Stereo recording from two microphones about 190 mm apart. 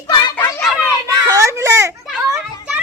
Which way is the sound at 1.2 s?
15° right (ahead or behind).